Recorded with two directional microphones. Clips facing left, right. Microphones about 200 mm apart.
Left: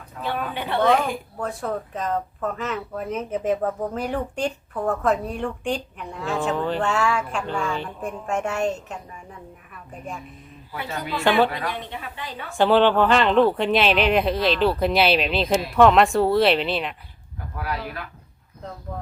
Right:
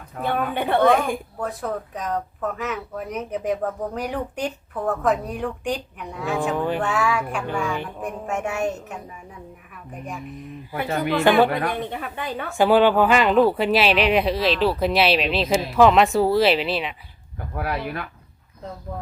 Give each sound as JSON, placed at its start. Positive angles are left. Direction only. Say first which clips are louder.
{"t": 0.2, "sound": "a woman's voice", "louder": "right 4 dB", "side_deg": -50}
{"t": 1.4, "sound": "a woman's voice", "louder": "even", "side_deg": 0}
{"t": 10.7, "sound": "a woman's voice", "louder": "right 6 dB", "side_deg": -50}
{"t": 11.2, "sound": "a woman's voice", "louder": "right 2 dB", "side_deg": -15}
{"t": 11.4, "sound": "a woman's voice", "louder": "right 4 dB", "side_deg": -55}
{"t": 12.5, "sound": "speech", "louder": "right 1 dB", "side_deg": -10}
{"t": 17.6, "sound": "speech", "louder": "right 3 dB", "side_deg": -60}